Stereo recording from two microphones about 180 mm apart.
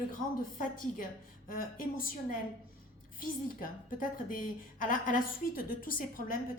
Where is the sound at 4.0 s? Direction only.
50° left (ahead or behind).